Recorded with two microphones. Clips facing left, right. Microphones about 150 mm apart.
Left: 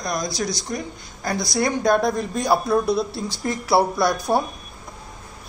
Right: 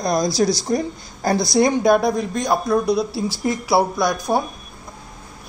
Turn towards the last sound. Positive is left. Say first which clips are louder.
# even
turn(degrees=10)  # may be behind; listen again after turning